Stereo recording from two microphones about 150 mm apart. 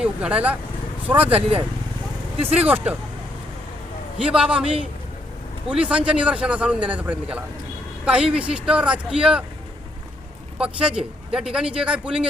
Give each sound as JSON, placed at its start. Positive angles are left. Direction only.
{"t": 0.0, "sound": "a man's voice", "side_deg": -5}
{"t": 1.3, "sound": "speech", "side_deg": -40}
{"t": 2.6, "sound": "a man's voice", "side_deg": -10}
{"t": 4.2, "sound": "a man's voice", "side_deg": -5}
{"t": 5.6, "sound": "a man's voice", "side_deg": -5}
{"t": 10.6, "sound": "a man's voice", "side_deg": -5}